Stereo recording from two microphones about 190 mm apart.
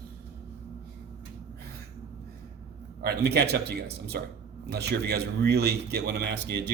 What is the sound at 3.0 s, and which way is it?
Speech, 60° right (ahead or behind).